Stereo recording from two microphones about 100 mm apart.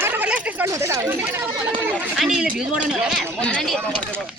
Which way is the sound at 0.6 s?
30° right (ahead or behind).